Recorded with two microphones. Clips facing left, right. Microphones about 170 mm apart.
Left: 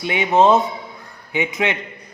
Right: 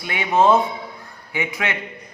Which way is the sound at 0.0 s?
20° left (ahead or behind).